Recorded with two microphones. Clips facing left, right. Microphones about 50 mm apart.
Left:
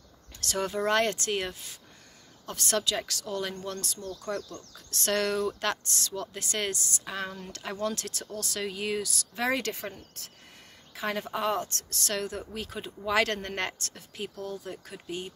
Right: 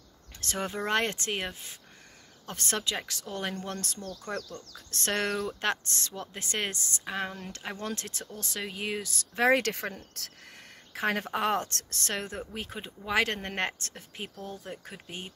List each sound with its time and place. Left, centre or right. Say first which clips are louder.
0.4 s speech: left 3 dB; right
3.3 s speech: even; right
4.3 s speech: left 2 dB; right
9.1 s a woman's voice: right 5 dB; right
10.9 s a woman's voice: right 2 dB; right
11.9 s speech: left 3 dB; right